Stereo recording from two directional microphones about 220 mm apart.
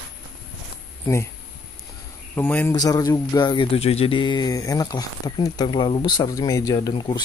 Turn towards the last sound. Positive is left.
turn(degrees=20)  # may be behind; listen again after turning